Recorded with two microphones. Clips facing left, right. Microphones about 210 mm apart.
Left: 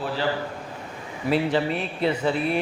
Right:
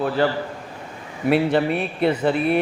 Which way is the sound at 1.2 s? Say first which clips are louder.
Right 4 dB; 60° right (ahead or behind).